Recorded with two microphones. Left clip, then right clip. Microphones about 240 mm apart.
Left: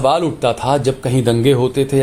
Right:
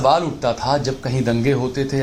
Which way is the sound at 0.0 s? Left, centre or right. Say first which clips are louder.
Left 2 dB; left.